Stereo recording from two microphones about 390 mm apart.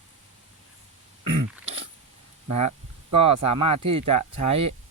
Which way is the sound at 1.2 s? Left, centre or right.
Right.